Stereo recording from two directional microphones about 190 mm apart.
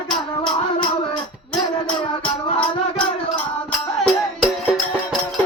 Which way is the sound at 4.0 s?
Centre (ahead or behind).